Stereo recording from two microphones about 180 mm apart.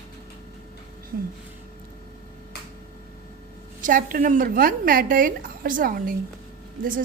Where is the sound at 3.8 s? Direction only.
50° right (ahead or behind).